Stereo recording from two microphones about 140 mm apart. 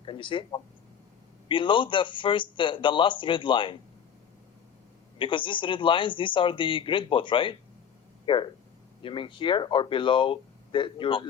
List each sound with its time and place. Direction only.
0.0 s speech: 35° left (ahead or behind)
5.1 s speech: 35° left (ahead or behind)